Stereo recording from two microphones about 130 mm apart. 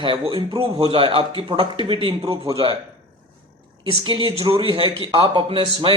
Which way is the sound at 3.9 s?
40° right (ahead or behind).